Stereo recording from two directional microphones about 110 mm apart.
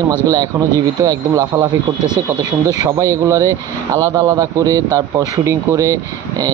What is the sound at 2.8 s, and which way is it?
Speech, 30° right (ahead or behind).